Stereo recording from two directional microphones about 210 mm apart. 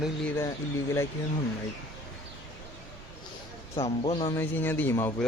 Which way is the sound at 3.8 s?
25° left (ahead or behind).